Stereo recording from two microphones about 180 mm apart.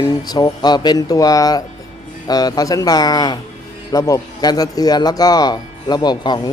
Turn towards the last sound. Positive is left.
turn(degrees=25)  # may be behind; listen again after turning